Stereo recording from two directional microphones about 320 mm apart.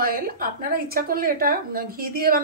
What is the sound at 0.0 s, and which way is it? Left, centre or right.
A woman's voice, right.